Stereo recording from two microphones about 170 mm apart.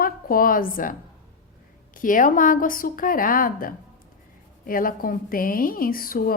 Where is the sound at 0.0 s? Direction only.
55° left (ahead or behind).